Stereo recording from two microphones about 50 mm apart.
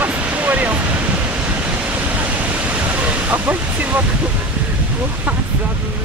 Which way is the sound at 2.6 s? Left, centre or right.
Right.